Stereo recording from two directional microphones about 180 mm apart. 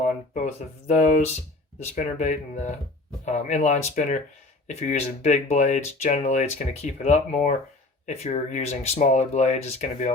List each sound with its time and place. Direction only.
0.9 s speech: 45° left (ahead or behind)